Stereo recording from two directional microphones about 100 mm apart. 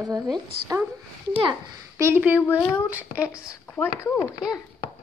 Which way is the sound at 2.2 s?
15° right (ahead or behind).